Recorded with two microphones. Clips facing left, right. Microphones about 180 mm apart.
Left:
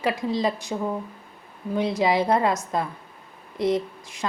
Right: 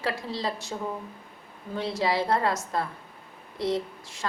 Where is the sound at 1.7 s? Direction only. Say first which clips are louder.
Left 5 dB; 15° left (ahead or behind).